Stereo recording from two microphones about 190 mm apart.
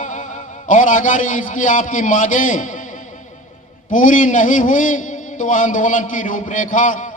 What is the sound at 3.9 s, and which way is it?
A man's voice, 40° left (ahead or behind).